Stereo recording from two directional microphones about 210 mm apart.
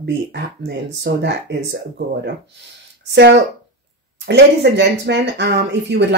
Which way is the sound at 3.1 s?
55° right (ahead or behind).